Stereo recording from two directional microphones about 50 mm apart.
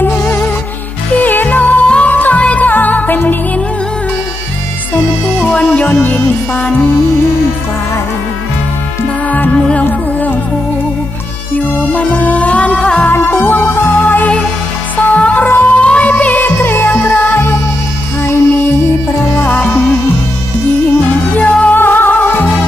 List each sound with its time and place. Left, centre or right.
0.0 s music: left
5.4 s music: left
6.0 s music: left
9.2 s music: left
11.9 s music: left
13.2 s music: left
16.4 s music: left
17.3 s music: left
19.5 s music: left
21.3 s music: left
21.8 s music: left